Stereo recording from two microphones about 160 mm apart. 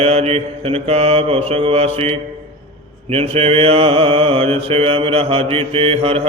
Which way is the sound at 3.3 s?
40° right (ahead or behind).